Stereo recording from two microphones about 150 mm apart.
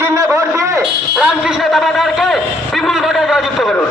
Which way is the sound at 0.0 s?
20° right (ahead or behind).